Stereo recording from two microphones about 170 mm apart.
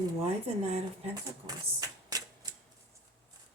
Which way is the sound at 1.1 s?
20° right (ahead or behind).